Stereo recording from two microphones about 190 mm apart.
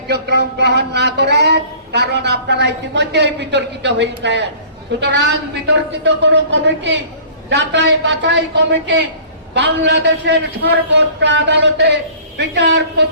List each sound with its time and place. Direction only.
0.1 s a man's voice: 60° right (ahead or behind)